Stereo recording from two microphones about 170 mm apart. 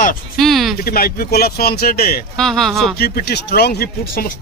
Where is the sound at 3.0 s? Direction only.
70° left (ahead or behind).